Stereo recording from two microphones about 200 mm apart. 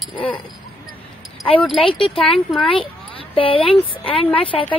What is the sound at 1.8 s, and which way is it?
Speech, 25° left (ahead or behind).